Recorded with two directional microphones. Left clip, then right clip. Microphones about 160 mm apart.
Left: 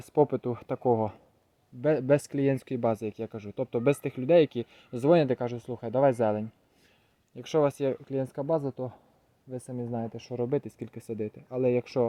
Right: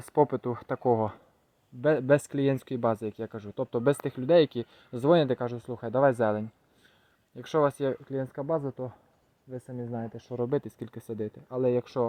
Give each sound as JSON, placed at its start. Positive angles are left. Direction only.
{"t": 0.1, "sound": "speech", "side_deg": 15}
{"t": 8.0, "sound": "speech", "side_deg": 20}